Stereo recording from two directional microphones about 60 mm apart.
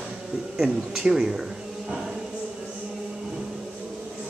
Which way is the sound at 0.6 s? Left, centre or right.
Centre.